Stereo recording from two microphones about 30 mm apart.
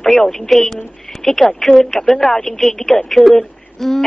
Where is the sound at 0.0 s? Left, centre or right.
Centre.